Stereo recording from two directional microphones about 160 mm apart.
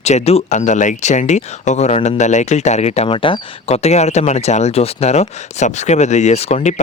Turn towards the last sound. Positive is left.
turn(degrees=45)  # may be behind; listen again after turning